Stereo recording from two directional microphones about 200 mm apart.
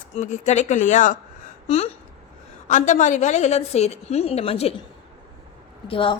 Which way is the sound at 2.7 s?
40° left (ahead or behind).